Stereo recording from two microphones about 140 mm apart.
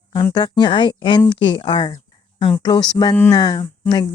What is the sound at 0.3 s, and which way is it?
Speech, 30° left (ahead or behind).